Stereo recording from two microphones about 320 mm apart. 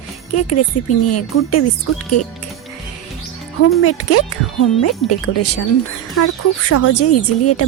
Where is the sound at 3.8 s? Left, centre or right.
Left.